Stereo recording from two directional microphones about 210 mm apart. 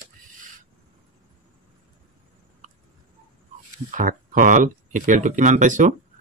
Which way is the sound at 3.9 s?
40° right (ahead or behind).